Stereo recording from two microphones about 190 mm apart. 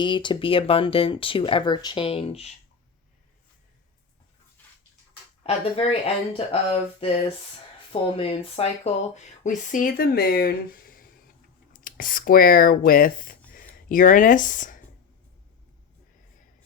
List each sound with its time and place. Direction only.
0.0 s speech: 25° left (ahead or behind)
5.4 s speech: 30° left (ahead or behind)
8.2 s speech: 30° left (ahead or behind)